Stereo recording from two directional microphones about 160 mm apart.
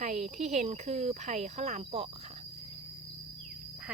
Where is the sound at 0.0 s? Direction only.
45° right (ahead or behind).